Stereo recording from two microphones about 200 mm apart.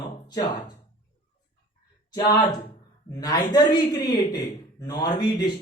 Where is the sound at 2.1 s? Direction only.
15° left (ahead or behind).